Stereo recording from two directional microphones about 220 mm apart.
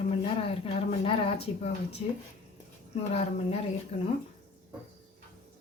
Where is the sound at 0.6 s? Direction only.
25° left (ahead or behind).